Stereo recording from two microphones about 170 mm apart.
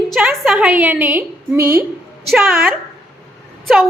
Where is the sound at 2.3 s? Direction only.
Centre (ahead or behind).